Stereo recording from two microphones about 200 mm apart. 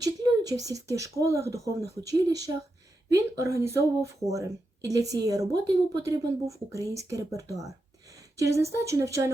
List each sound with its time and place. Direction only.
0.0 s speech: 20° right (ahead or behind)